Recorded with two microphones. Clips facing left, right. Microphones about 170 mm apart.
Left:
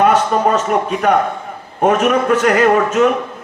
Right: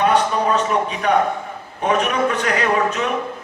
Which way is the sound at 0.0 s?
55° left (ahead or behind).